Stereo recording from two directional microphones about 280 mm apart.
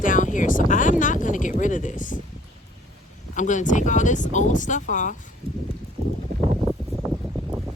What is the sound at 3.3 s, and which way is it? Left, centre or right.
Speech, left.